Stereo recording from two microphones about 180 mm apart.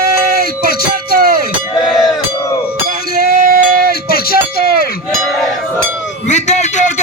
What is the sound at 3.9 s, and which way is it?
Music, 60° left (ahead or behind).